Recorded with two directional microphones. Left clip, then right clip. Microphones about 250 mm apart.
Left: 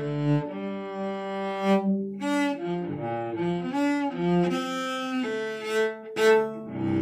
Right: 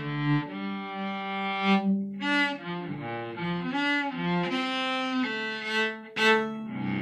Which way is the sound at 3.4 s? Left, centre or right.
Left.